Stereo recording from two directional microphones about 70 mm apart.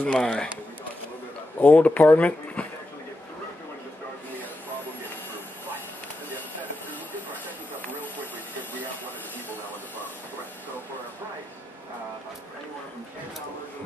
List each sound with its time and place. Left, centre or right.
0.0 s speech: centre
1.6 s speech: left